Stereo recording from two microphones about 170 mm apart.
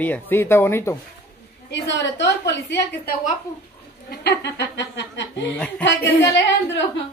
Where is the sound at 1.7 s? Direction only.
90° left.